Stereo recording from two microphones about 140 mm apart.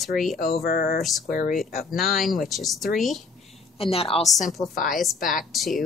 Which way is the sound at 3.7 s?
45° left (ahead or behind).